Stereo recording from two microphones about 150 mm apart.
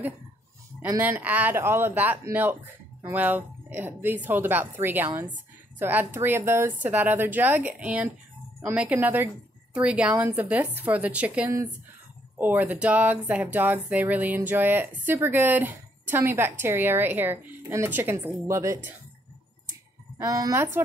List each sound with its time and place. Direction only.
0.8 s speech: 20° right (ahead or behind)
20.2 s a woman's voice: 25° right (ahead or behind)